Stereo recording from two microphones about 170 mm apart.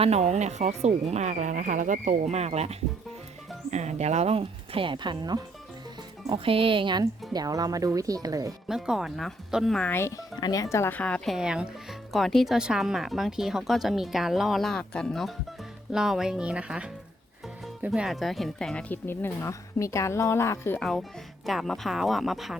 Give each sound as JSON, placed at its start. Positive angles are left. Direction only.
{"t": 0.0, "sound": "speech", "side_deg": -40}
{"t": 8.6, "sound": "speech", "side_deg": -5}
{"t": 11.3, "sound": "speech", "side_deg": -5}
{"t": 21.4, "sound": "speech", "side_deg": 0}